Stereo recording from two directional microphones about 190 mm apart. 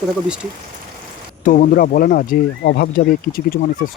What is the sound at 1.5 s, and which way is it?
Speech, 45° left (ahead or behind).